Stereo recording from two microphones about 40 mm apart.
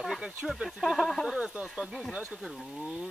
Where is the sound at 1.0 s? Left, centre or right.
Centre.